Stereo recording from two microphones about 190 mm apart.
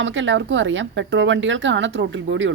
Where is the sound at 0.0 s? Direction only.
80° right.